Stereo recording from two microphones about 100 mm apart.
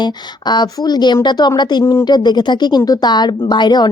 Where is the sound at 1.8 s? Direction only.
25° left (ahead or behind).